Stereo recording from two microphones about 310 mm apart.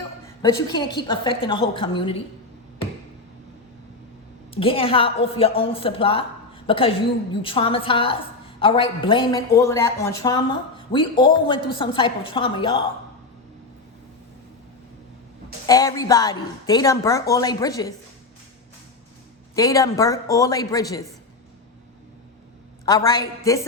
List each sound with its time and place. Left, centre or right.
0.4 s a woman's voice: centre
4.5 s a woman's voice: centre
15.6 s a woman's voice: centre
19.5 s a woman's voice: centre
22.9 s a woman's voice: centre